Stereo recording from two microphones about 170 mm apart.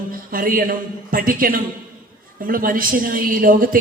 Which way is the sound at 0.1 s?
55° right (ahead or behind).